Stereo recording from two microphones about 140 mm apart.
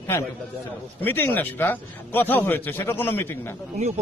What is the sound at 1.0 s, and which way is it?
A man's voice, 15° left (ahead or behind).